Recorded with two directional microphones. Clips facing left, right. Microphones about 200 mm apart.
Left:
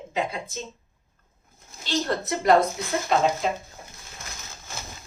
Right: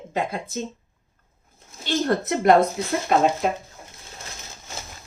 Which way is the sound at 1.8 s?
55° right (ahead or behind).